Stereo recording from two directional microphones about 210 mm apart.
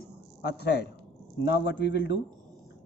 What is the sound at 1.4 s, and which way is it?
Speech, 55° left (ahead or behind).